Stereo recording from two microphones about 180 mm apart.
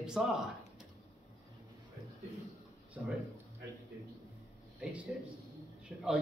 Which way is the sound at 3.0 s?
5° right (ahead or behind).